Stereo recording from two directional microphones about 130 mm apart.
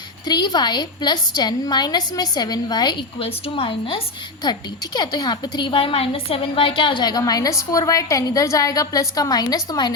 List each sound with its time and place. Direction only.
0.3 s a woman's voice: 30° left (ahead or behind)
3.2 s a woman's voice: 45° left (ahead or behind)
4.9 s a woman's voice: 30° left (ahead or behind)